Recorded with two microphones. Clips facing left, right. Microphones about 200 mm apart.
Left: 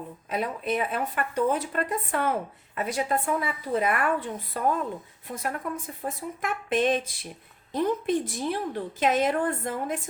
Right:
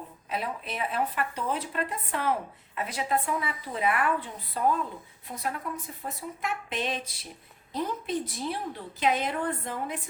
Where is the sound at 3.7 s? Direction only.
45° left (ahead or behind).